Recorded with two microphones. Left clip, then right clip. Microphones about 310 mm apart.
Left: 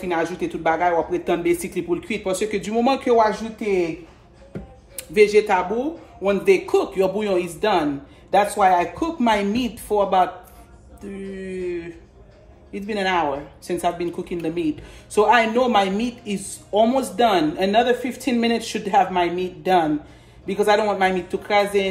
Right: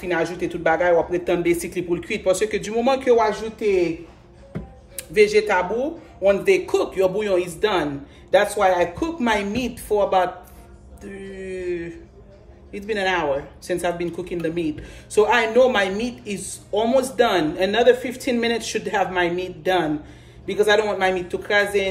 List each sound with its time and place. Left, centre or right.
0.0 s speech: centre
4.9 s speech: centre
11.1 s a sound: centre
12.7 s speech: centre